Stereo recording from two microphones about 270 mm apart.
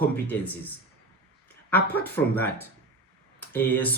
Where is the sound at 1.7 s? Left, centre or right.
Centre.